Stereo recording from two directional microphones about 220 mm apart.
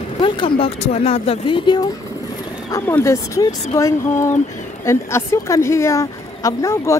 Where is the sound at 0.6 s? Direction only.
30° left (ahead or behind).